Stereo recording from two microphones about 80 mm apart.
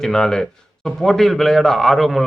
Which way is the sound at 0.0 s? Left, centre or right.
Centre.